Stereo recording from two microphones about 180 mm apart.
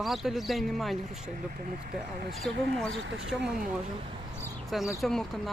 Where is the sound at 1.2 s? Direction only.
50° right (ahead or behind).